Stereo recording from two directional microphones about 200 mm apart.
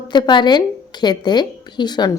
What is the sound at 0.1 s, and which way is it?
A woman's voice, 20° left (ahead or behind).